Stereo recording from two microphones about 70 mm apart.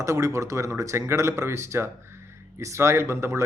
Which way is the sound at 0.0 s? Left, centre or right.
Right.